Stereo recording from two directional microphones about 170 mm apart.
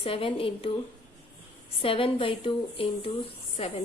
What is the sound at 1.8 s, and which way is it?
A woman's voice, 35° left (ahead or behind).